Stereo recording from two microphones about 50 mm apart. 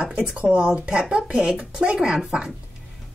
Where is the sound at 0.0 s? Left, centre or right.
Centre.